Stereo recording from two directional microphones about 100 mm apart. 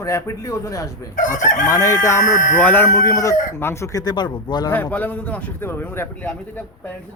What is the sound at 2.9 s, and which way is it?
Speech, 30° left (ahead or behind).